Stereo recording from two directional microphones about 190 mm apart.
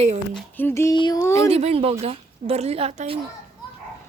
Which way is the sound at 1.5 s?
30° right (ahead or behind).